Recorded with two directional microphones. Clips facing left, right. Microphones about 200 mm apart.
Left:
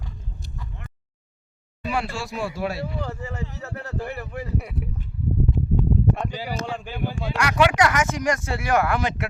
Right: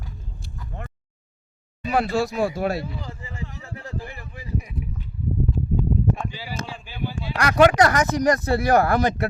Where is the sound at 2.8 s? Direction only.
70° left (ahead or behind).